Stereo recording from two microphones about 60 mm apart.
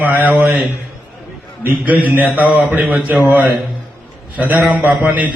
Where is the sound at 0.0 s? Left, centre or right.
Right.